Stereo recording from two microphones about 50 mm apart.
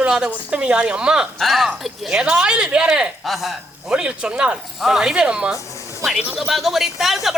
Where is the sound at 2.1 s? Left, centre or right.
Centre.